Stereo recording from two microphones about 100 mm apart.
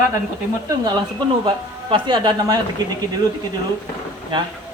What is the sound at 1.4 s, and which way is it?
A man's voice, 50° right (ahead or behind).